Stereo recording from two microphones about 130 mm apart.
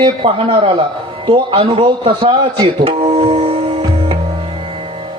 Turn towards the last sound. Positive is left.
turn(degrees=-45)  # may be behind; listen again after turning